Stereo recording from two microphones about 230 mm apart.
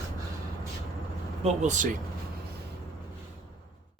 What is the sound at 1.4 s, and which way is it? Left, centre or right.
Speech, right.